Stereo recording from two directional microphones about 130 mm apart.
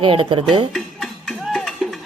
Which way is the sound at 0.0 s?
40° right (ahead or behind).